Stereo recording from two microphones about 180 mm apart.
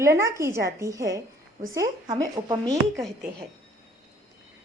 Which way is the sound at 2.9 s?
Centre (ahead or behind).